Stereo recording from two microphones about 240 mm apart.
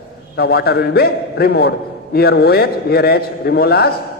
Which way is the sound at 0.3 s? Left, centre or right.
Left.